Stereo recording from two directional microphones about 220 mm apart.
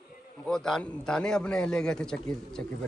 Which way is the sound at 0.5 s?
5° left (ahead or behind).